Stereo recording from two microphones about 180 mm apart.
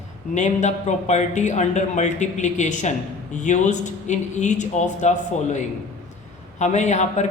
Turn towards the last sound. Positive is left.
turn(degrees=40)  # may be behind; listen again after turning